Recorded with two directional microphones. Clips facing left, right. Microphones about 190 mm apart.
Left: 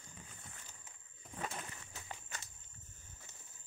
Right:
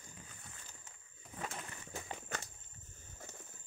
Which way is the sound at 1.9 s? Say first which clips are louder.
Right 8 dB; 50° right (ahead or behind).